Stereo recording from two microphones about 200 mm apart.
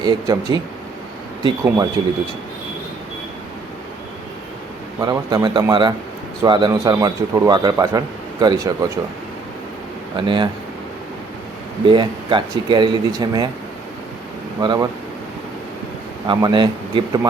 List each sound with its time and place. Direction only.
0.0 s a man's voice: 20° right (ahead or behind)
1.6 s speech: 10° right (ahead or behind)
4.9 s a man's voice: 20° right (ahead or behind)
10.2 s a man's voice: 25° right (ahead or behind)
11.9 s a man's voice: 25° right (ahead or behind)
14.6 s a man's voice: 20° right (ahead or behind)
16.2 s a man's voice: 20° right (ahead or behind)